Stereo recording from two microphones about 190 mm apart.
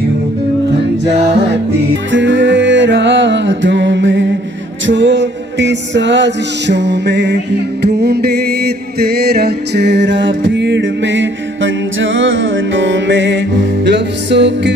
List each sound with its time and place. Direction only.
2.0 s music: 75° right (ahead or behind)